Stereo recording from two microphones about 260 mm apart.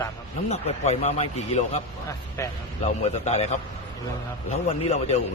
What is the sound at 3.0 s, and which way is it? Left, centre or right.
A man's voice, left.